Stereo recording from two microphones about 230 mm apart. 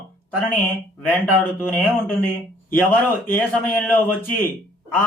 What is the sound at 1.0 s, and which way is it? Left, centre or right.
Speech, centre.